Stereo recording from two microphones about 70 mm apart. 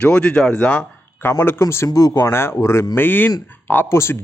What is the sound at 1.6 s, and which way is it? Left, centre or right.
Speech, left.